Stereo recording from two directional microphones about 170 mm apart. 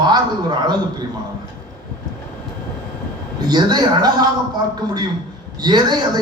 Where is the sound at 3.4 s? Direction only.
25° right (ahead or behind).